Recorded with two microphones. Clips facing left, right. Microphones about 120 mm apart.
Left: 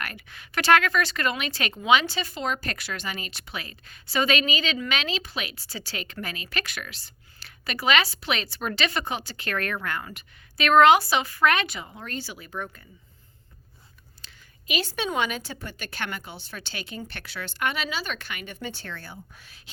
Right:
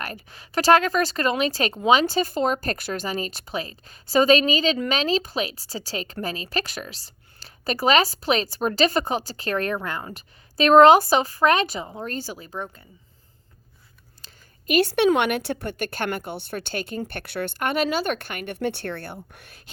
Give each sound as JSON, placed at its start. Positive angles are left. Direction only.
{"t": 0.0, "sound": "a woman's voice", "side_deg": -35}
{"t": 14.3, "sound": "a woman's voice", "side_deg": -55}